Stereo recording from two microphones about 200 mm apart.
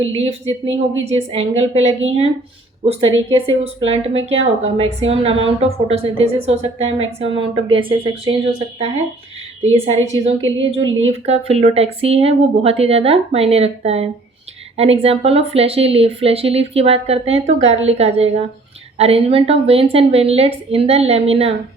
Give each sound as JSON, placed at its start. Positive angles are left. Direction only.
{"t": 0.0, "sound": "a woman's voice", "side_deg": -30}